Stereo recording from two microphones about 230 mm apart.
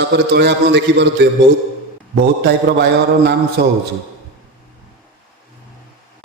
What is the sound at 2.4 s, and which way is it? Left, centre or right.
A man's voice, right.